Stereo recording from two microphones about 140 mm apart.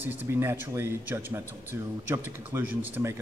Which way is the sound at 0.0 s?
15° right (ahead or behind).